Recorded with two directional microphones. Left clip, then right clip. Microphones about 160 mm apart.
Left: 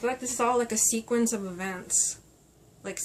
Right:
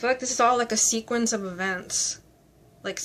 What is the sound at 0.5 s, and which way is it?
Speech, 20° right (ahead or behind).